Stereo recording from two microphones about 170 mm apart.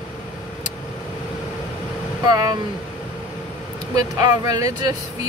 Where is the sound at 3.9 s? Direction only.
20° right (ahead or behind).